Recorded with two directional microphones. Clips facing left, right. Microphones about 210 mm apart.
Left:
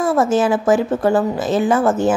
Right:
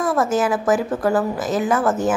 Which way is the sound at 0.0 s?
25° left (ahead or behind).